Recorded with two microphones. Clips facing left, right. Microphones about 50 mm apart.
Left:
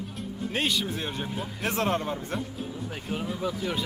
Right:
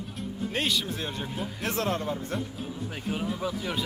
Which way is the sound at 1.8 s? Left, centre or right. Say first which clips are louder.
Left 2 dB; left.